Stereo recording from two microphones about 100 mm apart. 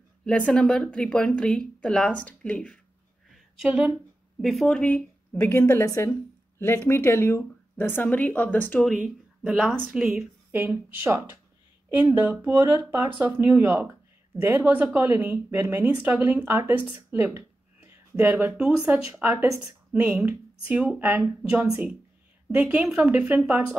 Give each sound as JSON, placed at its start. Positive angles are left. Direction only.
{"t": 0.2, "sound": "speech", "side_deg": 10}
{"t": 3.6, "sound": "speech", "side_deg": -10}
{"t": 5.9, "sound": "a woman's voice", "side_deg": 30}
{"t": 8.8, "sound": "a woman's voice", "side_deg": -5}
{"t": 11.1, "sound": "speech", "side_deg": -25}